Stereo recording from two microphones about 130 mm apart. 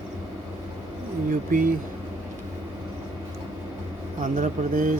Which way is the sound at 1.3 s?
90° right.